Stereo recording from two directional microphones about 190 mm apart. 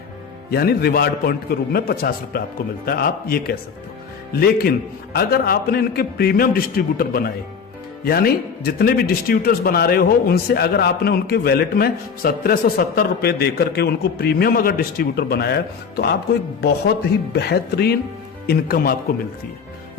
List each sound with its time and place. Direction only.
0.5 s a man's voice: 55° left (ahead or behind)
17.3 s a man's voice: 60° left (ahead or behind)